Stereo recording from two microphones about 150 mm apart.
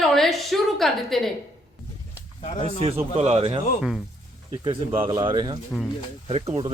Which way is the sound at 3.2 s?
45° right (ahead or behind).